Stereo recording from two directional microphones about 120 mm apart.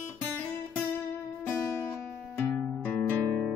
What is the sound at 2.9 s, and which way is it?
Music, 15° left (ahead or behind).